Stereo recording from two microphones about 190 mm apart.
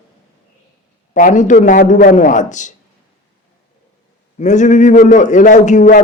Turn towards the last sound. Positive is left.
turn(degrees=45)  # may be behind; listen again after turning